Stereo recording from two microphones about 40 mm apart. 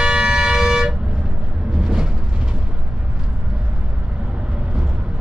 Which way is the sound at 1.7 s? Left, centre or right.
Right.